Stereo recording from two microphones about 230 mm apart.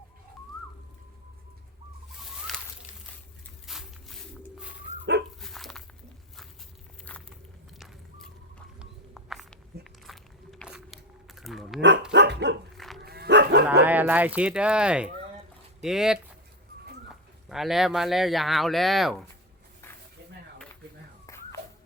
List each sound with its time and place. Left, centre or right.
2.5 s a sound: centre
3.7 s a sound: centre
5.4 s dog: centre
7.1 s biting: centre
7.8 s walk: centre
9.8 s biting: centre
12.1 s dog: right
12.7 s dog: centre
13.0 s dog: right
13.8 s speech: centre
21.2 s dog: centre